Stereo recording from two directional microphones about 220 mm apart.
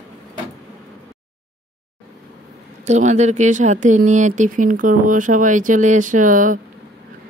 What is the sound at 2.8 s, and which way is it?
Speech, 30° right (ahead or behind).